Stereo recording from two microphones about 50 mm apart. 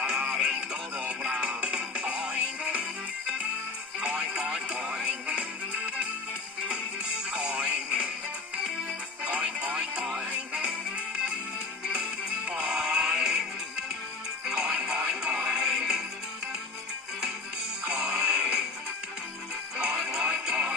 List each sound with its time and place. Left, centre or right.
0.0 s music: centre
4.2 s music: centre
5.0 s music: right
7.3 s music: centre
9.2 s music: right
10.7 s music: centre
12.5 s music: centre
14.4 s music: centre
17.9 s music: centre
19.7 s music: centre